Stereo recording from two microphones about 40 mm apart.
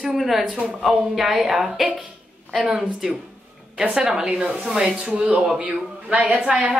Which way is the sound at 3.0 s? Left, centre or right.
Centre.